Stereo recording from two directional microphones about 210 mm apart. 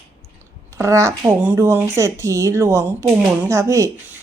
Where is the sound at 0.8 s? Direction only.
15° right (ahead or behind).